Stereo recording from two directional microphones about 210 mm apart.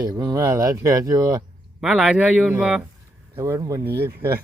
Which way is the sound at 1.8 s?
5° right (ahead or behind).